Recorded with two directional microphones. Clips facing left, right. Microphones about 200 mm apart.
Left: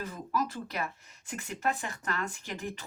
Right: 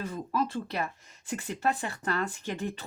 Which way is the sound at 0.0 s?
30° right (ahead or behind).